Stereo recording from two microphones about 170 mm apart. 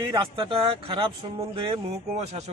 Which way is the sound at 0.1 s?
30° right (ahead or behind).